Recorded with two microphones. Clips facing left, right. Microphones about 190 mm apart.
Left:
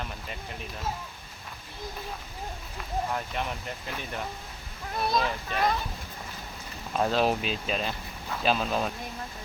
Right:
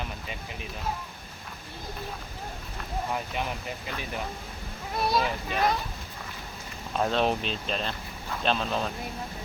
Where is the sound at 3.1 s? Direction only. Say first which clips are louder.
Right 1 dB; 5° right (ahead or behind).